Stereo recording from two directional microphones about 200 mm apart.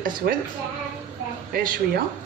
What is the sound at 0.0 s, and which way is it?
Speech, 50° right (ahead or behind).